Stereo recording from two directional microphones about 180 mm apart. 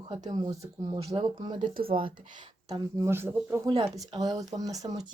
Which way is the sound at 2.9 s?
15° right (ahead or behind).